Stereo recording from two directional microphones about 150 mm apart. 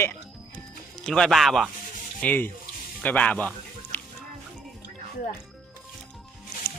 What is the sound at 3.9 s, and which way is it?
Music, 15° left (ahead or behind).